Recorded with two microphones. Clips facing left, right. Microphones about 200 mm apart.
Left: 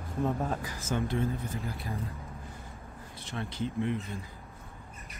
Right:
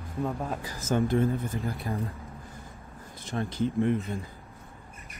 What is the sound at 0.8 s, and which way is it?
Speech, 45° right (ahead or behind).